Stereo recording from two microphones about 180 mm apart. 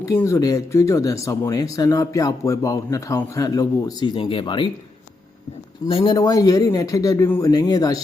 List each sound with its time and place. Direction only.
0.0 s speech: 15° left (ahead or behind)
5.9 s speech: 30° left (ahead or behind)